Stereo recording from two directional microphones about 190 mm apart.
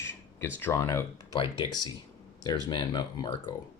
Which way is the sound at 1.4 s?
25° left (ahead or behind).